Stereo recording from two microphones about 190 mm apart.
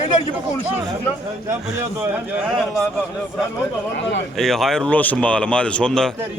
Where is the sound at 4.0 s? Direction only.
70° left (ahead or behind).